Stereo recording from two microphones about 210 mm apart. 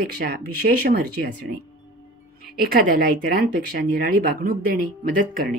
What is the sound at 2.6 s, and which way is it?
Speech, 45° right (ahead or behind).